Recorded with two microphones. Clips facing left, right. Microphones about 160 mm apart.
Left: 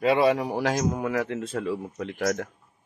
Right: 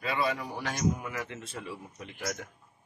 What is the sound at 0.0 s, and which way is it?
A man's voice, 80° left.